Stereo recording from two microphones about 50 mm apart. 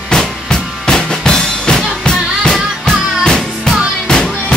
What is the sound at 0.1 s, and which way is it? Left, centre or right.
Drum, centre.